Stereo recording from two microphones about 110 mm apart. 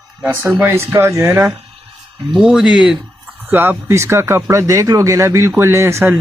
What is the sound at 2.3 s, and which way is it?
Speech, 5° right (ahead or behind).